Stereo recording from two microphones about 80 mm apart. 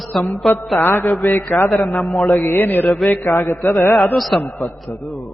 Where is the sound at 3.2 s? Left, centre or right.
Left.